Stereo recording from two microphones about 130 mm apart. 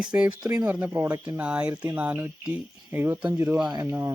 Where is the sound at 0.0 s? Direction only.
10° right (ahead or behind).